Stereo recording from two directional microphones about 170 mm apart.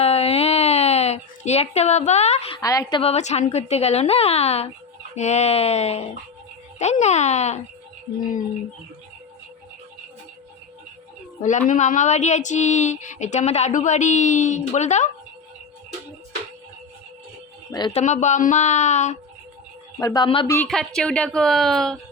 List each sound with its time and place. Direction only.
0.0 s a sound: 35° left (ahead or behind)
2.6 s a woman's voice: 20° left (ahead or behind)
3.0 s a woman's voice: 40° left (ahead or behind)
11.7 s speech: 45° left (ahead or behind)
17.7 s speech: 25° left (ahead or behind)
17.9 s speech: 45° left (ahead or behind)
20.0 s a woman's voice: 20° left (ahead or behind)
20.7 s a woman's voice: 5° left (ahead or behind)